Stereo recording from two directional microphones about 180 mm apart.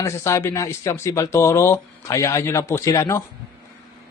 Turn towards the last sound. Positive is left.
turn(degrees=15)  # may be behind; listen again after turning